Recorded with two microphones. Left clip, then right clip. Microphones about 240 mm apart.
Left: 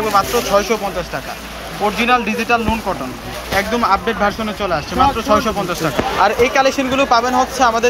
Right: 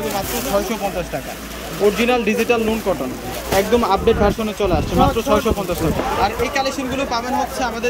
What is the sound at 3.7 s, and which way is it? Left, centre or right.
Speech, centre.